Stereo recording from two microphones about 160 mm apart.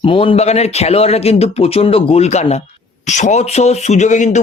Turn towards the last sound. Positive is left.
turn(degrees=50)  # may be behind; listen again after turning